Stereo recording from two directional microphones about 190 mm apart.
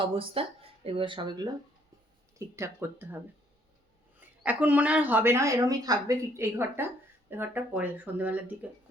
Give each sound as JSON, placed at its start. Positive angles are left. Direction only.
{"t": 0.0, "sound": "speech", "side_deg": -30}
{"t": 2.6, "sound": "a woman's voice", "side_deg": -10}
{"t": 4.4, "sound": "a woman's voice", "side_deg": -10}